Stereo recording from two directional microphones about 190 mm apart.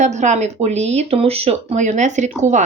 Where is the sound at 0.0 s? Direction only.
40° right (ahead or behind).